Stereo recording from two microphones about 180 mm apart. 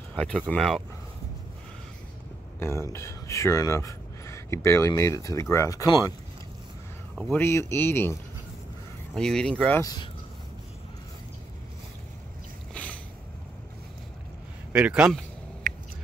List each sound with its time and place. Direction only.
0.1 s speech: 5° left (ahead or behind)
2.6 s speech: 15° left (ahead or behind)
7.3 s speech: 15° left (ahead or behind)
9.8 s speech: 20° left (ahead or behind)
12.7 s a sound: 5° left (ahead or behind)
14.7 s speech: 5° right (ahead or behind)
15.7 s a sound: 45° right (ahead or behind)